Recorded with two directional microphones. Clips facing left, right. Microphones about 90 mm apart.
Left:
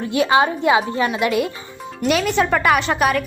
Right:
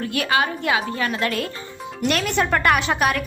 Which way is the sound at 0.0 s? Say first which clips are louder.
Left 5 dB; 20° left (ahead or behind).